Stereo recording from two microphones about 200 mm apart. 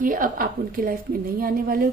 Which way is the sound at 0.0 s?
45° right (ahead or behind).